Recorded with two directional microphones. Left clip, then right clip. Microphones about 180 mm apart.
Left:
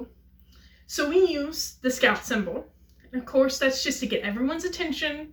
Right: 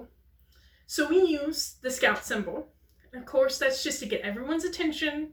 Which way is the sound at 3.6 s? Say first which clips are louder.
Left 3 dB; 20° right (ahead or behind).